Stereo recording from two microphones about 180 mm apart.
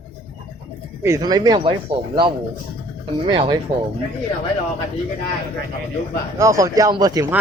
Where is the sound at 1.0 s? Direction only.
20° right (ahead or behind).